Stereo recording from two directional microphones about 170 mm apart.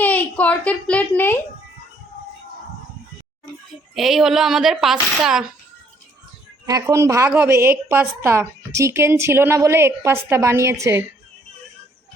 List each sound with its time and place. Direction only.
0.0 s a child's voice: 10° left (ahead or behind)
3.9 s a woman's voice: centre (ahead or behind)
6.7 s a woman's voice: 20° right (ahead or behind)